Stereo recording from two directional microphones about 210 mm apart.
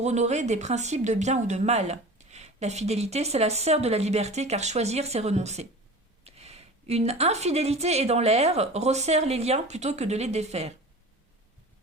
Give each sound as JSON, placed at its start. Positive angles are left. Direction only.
{"t": 0.0, "sound": "speech", "side_deg": -35}